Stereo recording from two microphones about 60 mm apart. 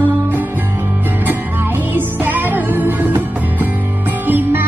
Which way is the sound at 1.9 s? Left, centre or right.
Right.